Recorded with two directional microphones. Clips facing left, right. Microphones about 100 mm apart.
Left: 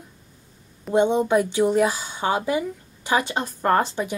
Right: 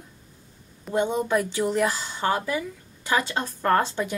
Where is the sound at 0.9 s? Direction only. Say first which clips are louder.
Left 5 dB; 20° left (ahead or behind).